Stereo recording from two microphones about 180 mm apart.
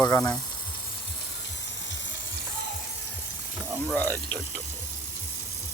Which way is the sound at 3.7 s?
5° right (ahead or behind).